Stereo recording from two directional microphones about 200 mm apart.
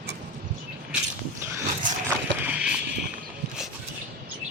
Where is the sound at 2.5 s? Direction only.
5° right (ahead or behind).